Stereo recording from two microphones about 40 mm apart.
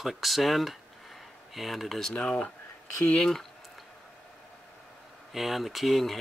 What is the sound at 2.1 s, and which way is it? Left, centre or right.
Speech, left.